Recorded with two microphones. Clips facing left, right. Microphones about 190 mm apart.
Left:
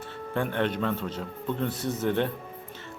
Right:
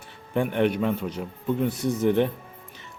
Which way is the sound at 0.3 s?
15° right (ahead or behind).